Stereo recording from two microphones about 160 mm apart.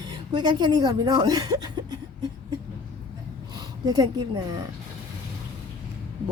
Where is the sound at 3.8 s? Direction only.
25° right (ahead or behind).